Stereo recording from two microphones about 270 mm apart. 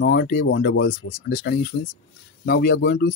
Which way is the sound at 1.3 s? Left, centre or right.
Left.